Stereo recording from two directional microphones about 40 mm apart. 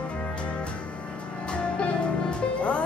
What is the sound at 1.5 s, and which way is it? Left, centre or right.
Music, left.